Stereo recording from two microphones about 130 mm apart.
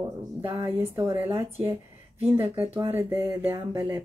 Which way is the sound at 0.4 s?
40° right (ahead or behind).